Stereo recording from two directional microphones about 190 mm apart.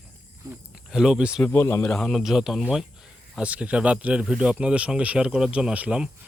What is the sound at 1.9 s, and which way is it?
Speech, centre (ahead or behind).